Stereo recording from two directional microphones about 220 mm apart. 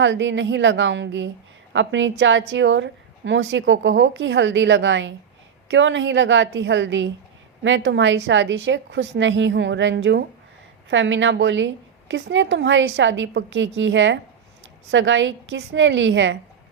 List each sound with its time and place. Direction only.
0.0 s a woman's voice: 55° right (ahead or behind)